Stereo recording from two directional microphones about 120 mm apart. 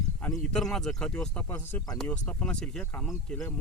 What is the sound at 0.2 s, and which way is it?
Speech, 5° left (ahead or behind).